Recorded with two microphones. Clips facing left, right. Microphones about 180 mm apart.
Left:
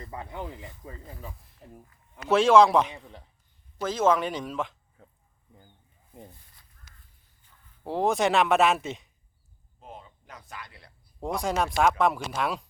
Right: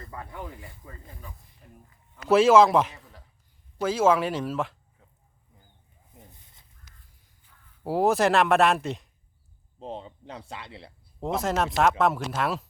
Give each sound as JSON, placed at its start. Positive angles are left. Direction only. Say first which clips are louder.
{"t": 0.1, "sound": "speech", "louder": "left 2 dB", "side_deg": 20}
{"t": 1.4, "sound": "speech", "louder": "left 4 dB", "side_deg": 0}
{"t": 6.4, "sound": "a sound", "louder": "right 2 dB", "side_deg": -25}
{"t": 7.3, "sound": "a man's voice", "louder": "left 1 dB", "side_deg": -10}
{"t": 9.8, "sound": "speech", "louder": "right 9 dB", "side_deg": -30}
{"t": 11.3, "sound": "speech", "louder": "right 1 dB", "side_deg": 0}